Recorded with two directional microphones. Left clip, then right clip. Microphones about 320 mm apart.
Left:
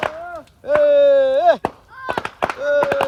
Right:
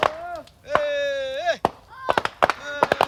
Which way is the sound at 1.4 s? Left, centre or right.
Centre.